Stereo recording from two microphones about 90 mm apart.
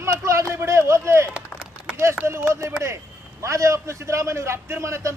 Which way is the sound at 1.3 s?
10° right (ahead or behind).